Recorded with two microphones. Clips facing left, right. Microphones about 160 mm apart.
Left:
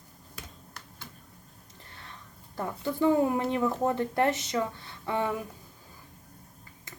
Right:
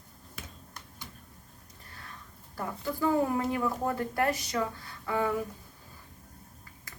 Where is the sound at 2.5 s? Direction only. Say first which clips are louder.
Left 2 dB; 25° left (ahead or behind).